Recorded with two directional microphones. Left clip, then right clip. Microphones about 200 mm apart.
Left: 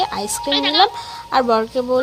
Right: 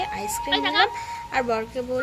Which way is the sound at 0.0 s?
25° left (ahead or behind).